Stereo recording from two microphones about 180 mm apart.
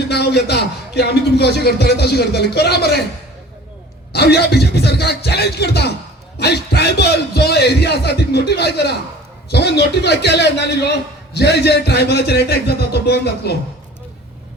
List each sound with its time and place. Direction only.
0.1 s a man's voice: 65° left (ahead or behind)
4.1 s a man's voice: 65° left (ahead or behind)